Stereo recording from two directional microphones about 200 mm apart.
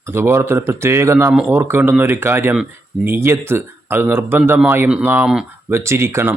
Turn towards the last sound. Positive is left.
turn(degrees=-15)  # may be behind; listen again after turning